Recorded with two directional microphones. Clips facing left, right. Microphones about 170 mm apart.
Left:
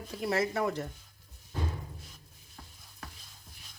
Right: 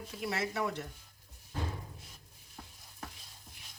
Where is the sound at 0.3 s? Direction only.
40° left (ahead or behind).